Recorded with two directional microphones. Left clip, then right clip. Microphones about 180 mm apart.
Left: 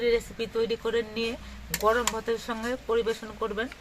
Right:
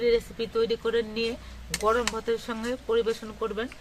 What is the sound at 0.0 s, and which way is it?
Speech, 20° right (ahead or behind).